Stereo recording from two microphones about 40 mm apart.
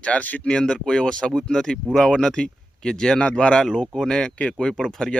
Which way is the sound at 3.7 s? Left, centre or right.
Centre.